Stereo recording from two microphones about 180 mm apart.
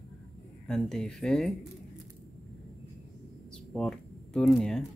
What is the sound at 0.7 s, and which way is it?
Speech, 5° left (ahead or behind).